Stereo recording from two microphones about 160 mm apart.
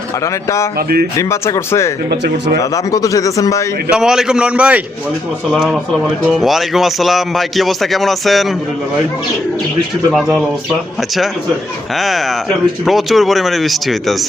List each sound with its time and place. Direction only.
1.1 s a man's voice: 20° left (ahead or behind)
2.0 s speech: 90° right
2.6 s a man's voice: 20° left (ahead or behind)
3.9 s speech: 5° right (ahead or behind)
10.1 s speech: centre (ahead or behind)
11.9 s speech: centre (ahead or behind)